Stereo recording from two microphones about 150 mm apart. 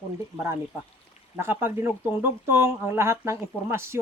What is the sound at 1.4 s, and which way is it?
A man's voice, 15° right (ahead or behind).